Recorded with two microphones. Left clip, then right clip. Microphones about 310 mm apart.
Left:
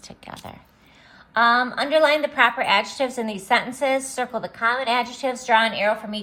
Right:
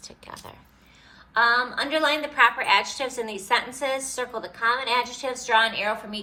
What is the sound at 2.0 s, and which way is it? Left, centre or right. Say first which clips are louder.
A woman's voice: left 2 dB; left.